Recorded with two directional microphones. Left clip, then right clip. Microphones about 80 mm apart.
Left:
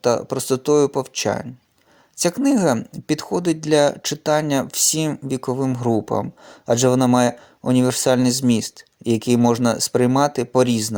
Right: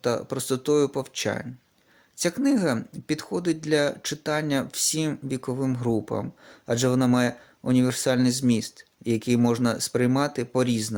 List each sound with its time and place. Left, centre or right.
0.0 s speech: left
2.1 s speech: left
2.9 s speech: left